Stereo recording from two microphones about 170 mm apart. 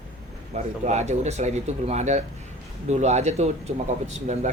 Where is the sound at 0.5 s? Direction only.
40° right (ahead or behind).